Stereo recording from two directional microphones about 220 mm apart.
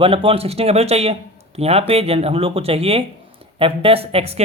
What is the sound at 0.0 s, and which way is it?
Speech, 25° right (ahead or behind).